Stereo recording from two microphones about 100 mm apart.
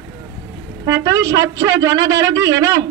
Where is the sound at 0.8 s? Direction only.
30° right (ahead or behind).